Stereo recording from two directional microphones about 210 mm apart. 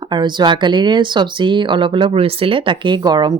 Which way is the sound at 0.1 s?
20° right (ahead or behind).